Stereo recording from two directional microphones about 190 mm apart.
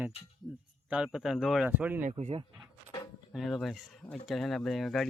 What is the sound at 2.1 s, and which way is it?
Speech, 35° right (ahead or behind).